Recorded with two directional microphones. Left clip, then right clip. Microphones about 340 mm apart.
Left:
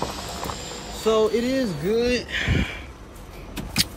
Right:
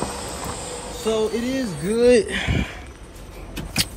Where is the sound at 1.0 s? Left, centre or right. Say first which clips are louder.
Left 2 dB; centre.